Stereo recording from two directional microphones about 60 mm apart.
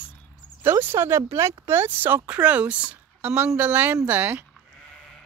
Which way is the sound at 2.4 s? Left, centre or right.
Right.